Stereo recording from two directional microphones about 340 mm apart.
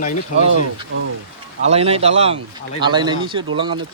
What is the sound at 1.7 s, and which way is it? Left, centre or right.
Speech, centre.